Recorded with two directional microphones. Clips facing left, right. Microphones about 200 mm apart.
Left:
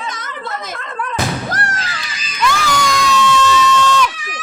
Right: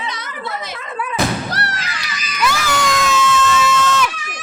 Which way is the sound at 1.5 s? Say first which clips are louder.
Left 2 dB; 45° left (ahead or behind).